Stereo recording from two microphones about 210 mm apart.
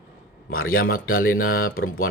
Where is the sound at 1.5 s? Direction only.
45° left (ahead or behind).